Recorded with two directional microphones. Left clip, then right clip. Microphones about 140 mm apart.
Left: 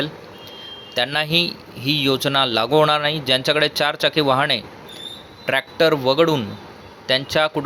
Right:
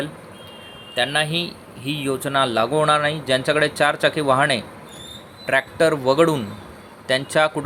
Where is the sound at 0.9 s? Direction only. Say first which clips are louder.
Left 2 dB; 20° left (ahead or behind).